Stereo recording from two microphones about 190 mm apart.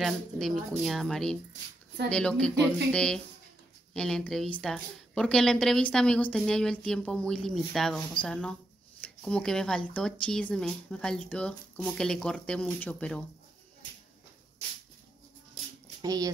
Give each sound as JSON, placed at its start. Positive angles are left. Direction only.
{"t": 0.0, "sound": "a woman's voice", "side_deg": 0}
{"t": 16.0, "sound": "speech", "side_deg": -20}